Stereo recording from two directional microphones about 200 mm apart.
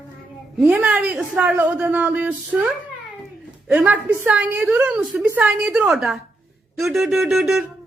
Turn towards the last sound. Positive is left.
turn(degrees=0)  # may be behind; listen again after turning